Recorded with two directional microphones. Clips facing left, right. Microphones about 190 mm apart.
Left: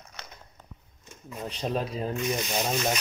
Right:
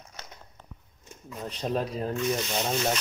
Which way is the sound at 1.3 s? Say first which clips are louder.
Even; 10° left (ahead or behind).